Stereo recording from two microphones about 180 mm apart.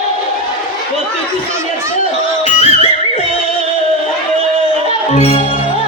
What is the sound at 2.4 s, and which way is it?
Music, 40° left (ahead or behind).